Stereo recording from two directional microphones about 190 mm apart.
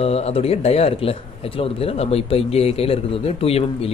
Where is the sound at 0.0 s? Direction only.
30° left (ahead or behind).